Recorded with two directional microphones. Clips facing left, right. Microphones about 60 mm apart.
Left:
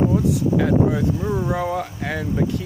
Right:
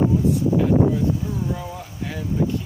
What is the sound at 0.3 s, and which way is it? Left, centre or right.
Speech, left.